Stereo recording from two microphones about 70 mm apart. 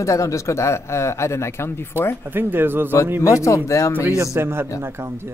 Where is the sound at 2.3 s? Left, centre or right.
Right.